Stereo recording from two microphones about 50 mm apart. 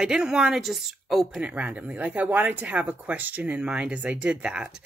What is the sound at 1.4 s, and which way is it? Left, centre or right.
Speech, right.